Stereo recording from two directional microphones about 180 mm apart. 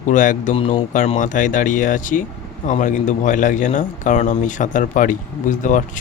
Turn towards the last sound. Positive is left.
turn(degrees=45)  # may be behind; listen again after turning